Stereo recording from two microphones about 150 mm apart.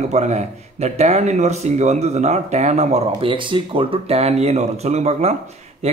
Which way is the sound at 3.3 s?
35° right (ahead or behind).